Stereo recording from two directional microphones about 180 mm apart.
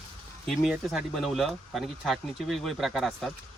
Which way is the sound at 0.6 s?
Centre (ahead or behind).